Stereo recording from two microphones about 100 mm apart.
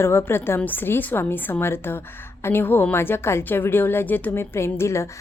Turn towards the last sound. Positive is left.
turn(degrees=25)  # may be behind; listen again after turning